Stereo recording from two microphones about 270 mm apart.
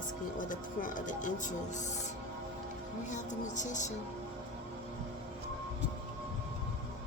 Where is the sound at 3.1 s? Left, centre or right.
Left.